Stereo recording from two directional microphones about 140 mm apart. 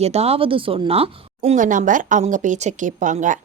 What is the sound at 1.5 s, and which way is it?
Speech, 65° right (ahead or behind).